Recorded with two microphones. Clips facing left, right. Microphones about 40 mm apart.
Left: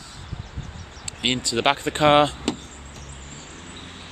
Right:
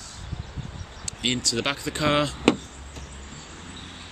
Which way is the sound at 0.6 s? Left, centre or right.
Left.